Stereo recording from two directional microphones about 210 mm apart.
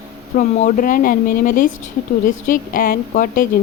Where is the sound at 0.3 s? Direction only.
40° left (ahead or behind).